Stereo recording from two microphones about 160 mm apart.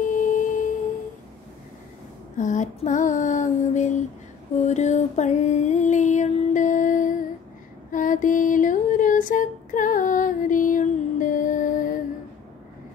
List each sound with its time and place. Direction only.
0.0 s tuning fork: 55° left (ahead or behind)
2.3 s female singing: 50° left (ahead or behind)
4.6 s music: 50° left (ahead or behind)
7.9 s female singing: 55° left (ahead or behind)